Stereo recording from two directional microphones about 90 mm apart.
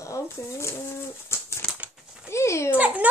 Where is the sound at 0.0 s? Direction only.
35° left (ahead or behind).